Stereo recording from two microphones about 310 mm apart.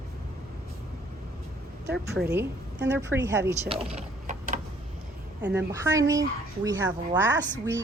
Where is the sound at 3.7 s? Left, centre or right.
Centre.